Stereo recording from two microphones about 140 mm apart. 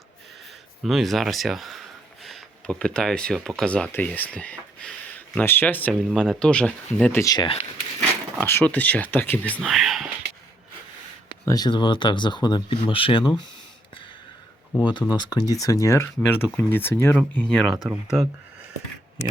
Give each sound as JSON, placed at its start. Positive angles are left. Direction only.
{"t": 0.8, "sound": "speech", "side_deg": 0}
{"t": 7.0, "sound": "speech", "side_deg": 15}
{"t": 7.3, "sound": "speech", "side_deg": 40}
{"t": 8.4, "sound": "speech", "side_deg": 15}
{"t": 9.6, "sound": "speech", "side_deg": 0}
{"t": 11.4, "sound": "speech", "side_deg": 30}
{"t": 14.7, "sound": "speech", "side_deg": 30}